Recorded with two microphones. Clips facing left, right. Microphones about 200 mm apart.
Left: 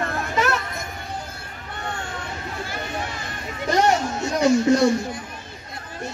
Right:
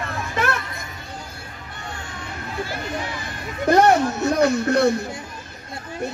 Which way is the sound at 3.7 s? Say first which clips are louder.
Right 4 dB; 55° right (ahead or behind).